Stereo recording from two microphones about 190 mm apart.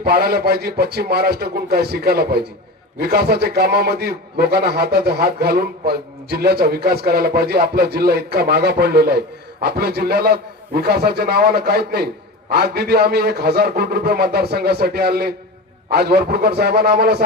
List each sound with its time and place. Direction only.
0.0 s a man's voice: 55° right (ahead or behind)